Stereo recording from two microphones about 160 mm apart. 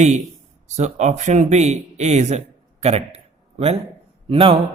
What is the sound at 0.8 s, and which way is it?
A man's voice, 45° right (ahead or behind).